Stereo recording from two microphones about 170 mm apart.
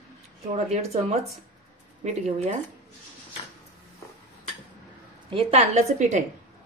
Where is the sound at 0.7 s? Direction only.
40° right (ahead or behind).